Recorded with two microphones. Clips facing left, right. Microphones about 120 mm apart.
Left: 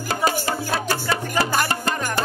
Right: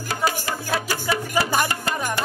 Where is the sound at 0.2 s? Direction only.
35° left (ahead or behind).